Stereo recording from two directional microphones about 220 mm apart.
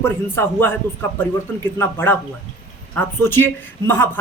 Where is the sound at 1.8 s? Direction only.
10° left (ahead or behind).